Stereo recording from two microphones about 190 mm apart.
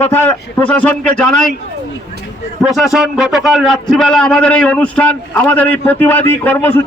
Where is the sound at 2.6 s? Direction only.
Centre (ahead or behind).